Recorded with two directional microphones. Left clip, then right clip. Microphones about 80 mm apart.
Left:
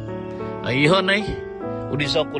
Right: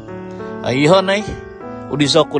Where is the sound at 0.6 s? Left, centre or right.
Right.